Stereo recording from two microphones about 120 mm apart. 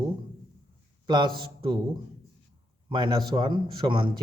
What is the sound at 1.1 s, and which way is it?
Speech, 40° right (ahead or behind).